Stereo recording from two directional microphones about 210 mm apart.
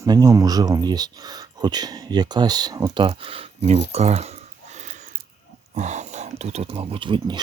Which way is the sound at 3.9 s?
30° right (ahead or behind).